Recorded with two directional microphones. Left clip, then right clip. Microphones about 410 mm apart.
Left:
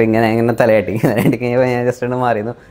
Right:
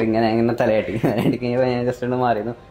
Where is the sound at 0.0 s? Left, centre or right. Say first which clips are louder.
Left 5 dB; left.